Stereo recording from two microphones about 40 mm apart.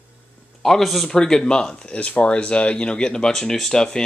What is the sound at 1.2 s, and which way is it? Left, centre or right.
Speech, centre.